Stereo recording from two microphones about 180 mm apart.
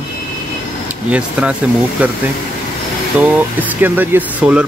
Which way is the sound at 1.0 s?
10° right (ahead or behind).